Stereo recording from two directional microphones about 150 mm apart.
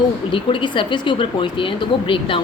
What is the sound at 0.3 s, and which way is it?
A woman's voice, 35° left (ahead or behind).